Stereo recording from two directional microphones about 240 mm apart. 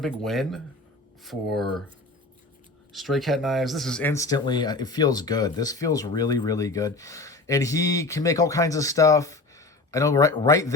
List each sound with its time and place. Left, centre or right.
0.2 s speech: centre
2.9 s speech: centre